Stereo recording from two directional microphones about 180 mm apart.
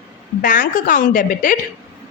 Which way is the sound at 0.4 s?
50° left (ahead or behind).